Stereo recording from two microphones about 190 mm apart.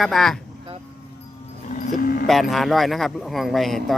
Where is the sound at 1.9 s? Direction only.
45° left (ahead or behind).